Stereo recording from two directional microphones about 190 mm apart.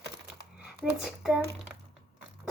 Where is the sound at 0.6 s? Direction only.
5° right (ahead or behind).